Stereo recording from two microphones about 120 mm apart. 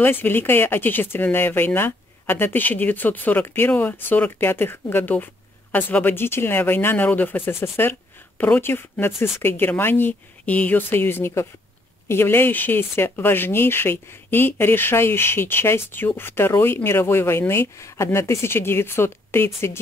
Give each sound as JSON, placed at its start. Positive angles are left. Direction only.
{"t": 0.0, "sound": "speech", "side_deg": 15}